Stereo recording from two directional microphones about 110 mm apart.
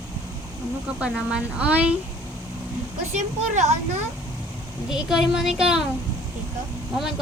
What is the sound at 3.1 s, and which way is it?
Speech, 90° right.